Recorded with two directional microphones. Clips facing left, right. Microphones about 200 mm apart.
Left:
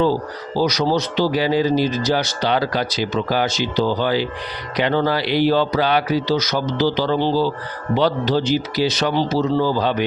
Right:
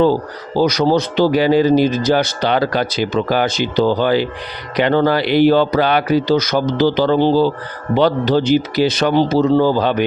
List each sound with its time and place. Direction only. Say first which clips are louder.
0.5 s a man's voice: right 4 dB; 55° right (ahead or behind)